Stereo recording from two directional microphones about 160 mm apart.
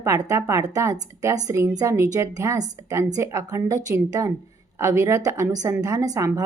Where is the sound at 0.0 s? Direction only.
20° right (ahead or behind).